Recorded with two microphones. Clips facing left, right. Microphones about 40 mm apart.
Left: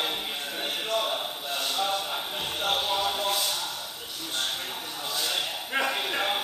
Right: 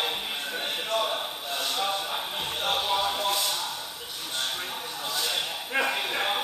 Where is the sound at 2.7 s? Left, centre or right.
Right.